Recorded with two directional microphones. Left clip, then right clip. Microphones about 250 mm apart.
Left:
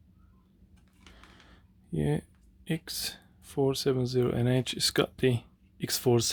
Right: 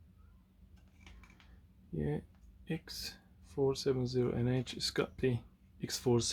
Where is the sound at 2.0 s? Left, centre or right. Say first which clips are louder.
Left 7 dB; left.